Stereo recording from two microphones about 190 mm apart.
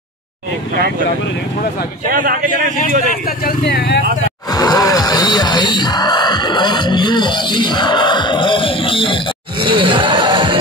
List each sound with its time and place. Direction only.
2.0 s a man's voice: 50° right (ahead or behind)
3.3 s speech: 50° left (ahead or behind)
4.5 s speech: 20° left (ahead or behind)
9.6 s a sound: 25° right (ahead or behind)